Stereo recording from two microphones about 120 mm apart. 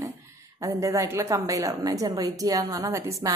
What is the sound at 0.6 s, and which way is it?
A woman's voice, 25° right (ahead or behind).